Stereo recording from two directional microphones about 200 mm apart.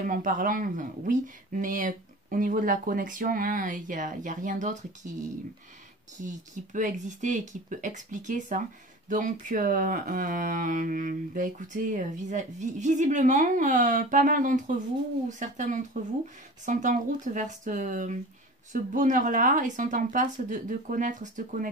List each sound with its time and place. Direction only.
0.0 s speech: 40° right (ahead or behind)